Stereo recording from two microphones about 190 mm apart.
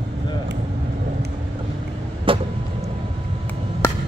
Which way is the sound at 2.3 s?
25° right (ahead or behind).